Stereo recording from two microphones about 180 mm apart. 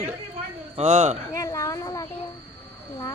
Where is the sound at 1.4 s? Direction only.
20° left (ahead or behind).